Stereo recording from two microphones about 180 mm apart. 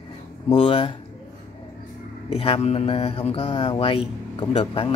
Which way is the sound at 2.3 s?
35° left (ahead or behind).